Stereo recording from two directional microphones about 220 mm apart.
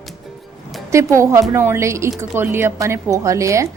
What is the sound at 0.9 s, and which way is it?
A woman's voice, 15° right (ahead or behind).